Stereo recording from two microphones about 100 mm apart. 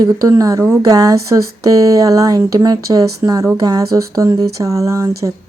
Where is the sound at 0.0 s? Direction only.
35° right (ahead or behind).